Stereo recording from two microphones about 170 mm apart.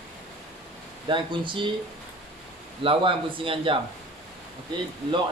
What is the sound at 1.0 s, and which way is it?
Speech, 30° right (ahead or behind).